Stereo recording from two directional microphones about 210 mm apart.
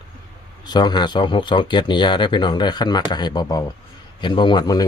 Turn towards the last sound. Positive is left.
turn(degrees=20)  # may be behind; listen again after turning